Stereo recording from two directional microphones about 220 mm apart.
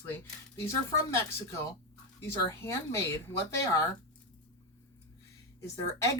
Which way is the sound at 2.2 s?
10° left (ahead or behind).